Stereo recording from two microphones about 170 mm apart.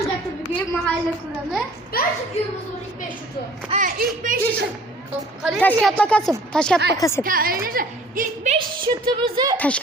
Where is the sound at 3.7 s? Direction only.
50° right (ahead or behind).